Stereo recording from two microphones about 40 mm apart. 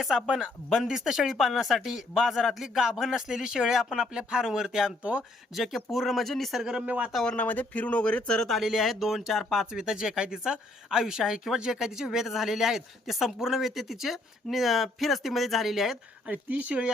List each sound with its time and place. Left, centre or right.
0.0 s speech: centre
0.7 s speech: centre
4.1 s speech: right; by 6.5 s centre
6.8 s speech: right
7.3 s speech: left
8.4 s speech: centre
9.7 s speech: centre
16.3 s speech: right